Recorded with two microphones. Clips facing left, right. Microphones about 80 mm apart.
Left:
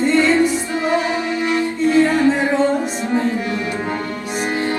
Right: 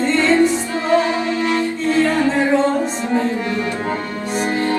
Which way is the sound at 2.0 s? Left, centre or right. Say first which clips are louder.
Left 1 dB; centre.